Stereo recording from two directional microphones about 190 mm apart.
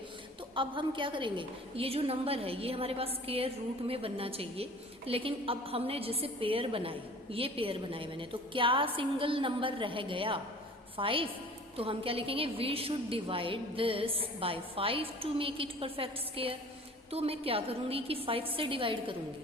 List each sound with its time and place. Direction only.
0.5 s a woman's voice: 25° right (ahead or behind)